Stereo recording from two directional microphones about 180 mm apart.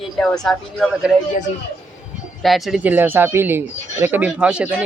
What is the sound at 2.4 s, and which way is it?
Speech, centre (ahead or behind).